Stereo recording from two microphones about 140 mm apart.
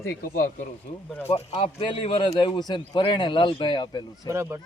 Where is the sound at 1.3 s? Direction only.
40° left (ahead or behind).